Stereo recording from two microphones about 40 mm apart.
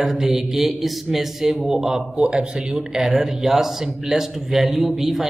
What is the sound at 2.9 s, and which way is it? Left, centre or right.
A man's voice, centre.